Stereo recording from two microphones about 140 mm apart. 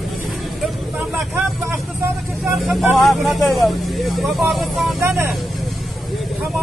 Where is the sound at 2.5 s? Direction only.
Centre (ahead or behind).